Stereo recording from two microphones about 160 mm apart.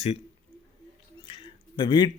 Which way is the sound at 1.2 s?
35° left (ahead or behind).